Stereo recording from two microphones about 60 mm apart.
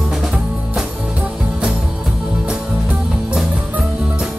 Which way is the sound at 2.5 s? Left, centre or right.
Centre.